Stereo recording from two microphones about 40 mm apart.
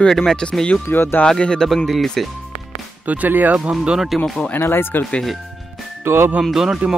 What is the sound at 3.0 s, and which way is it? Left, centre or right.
Speech, right.